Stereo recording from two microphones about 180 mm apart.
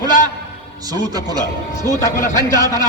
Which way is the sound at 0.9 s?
20° right (ahead or behind).